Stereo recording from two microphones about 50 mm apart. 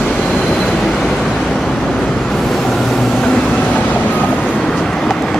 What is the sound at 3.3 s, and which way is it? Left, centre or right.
Train, left.